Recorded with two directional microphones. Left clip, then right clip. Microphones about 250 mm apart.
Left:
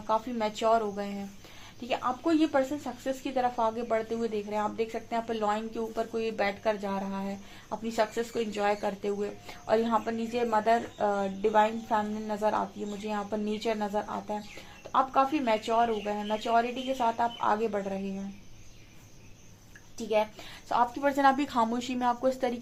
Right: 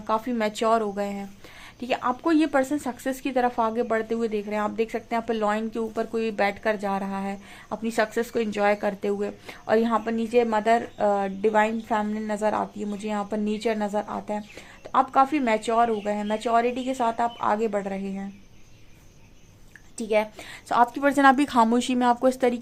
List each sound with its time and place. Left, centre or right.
0.1 s speech: right
20.0 s speech: right